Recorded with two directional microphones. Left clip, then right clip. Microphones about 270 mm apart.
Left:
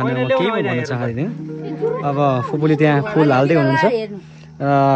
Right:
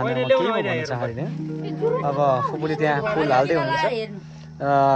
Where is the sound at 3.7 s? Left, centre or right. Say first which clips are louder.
Left 6 dB; left.